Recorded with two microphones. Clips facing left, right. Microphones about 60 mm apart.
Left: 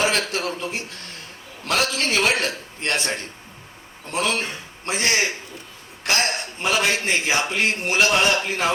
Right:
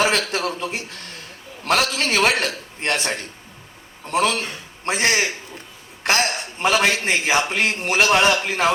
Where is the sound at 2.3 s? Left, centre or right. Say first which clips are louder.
Right 1 dB; left.